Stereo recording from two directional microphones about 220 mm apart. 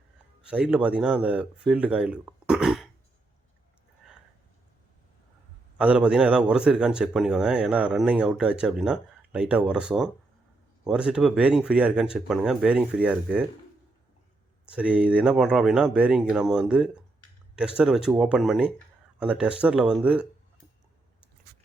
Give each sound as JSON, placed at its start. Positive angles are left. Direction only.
{"t": 0.4, "sound": "speech", "side_deg": -5}
{"t": 5.7, "sound": "speech", "side_deg": -5}
{"t": 14.7, "sound": "speech", "side_deg": -5}
{"t": 21.5, "sound": "biting", "side_deg": -50}